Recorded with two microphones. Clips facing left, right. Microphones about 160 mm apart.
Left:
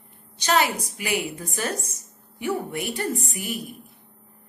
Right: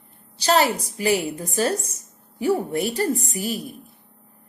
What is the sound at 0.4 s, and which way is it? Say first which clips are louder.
A woman's voice: right 3 dB; 35° right (ahead or behind).